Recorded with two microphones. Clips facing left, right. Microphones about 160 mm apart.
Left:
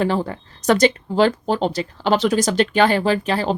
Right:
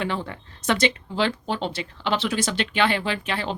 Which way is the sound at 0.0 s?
40° left (ahead or behind).